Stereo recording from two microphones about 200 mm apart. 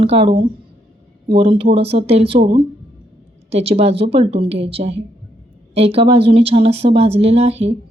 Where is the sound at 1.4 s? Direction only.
30° right (ahead or behind).